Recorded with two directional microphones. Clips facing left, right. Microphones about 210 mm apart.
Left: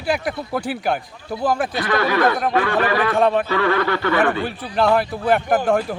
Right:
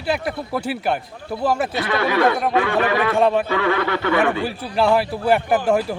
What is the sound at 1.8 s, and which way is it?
A man's voice, 15° right (ahead or behind).